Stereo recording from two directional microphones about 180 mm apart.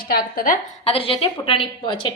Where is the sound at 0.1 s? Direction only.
50° left (ahead or behind).